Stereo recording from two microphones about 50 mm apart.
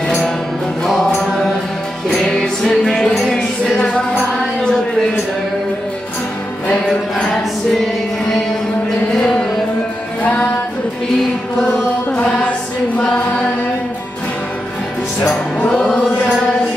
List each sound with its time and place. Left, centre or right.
2.0 s music: centre
4.4 s a sound: centre
10.2 s music: left
11.6 s chant: centre
15.7 s music: centre